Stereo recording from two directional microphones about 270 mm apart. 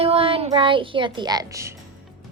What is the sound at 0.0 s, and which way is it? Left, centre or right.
Speech, right.